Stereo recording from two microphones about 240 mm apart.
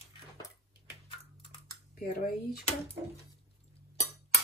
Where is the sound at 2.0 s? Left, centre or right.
Left.